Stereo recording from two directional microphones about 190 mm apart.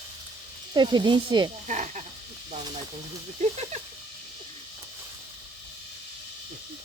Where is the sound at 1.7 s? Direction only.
40° right (ahead or behind).